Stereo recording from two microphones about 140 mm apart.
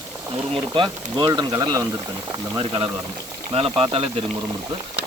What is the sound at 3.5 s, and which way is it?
Speech, 40° right (ahead or behind).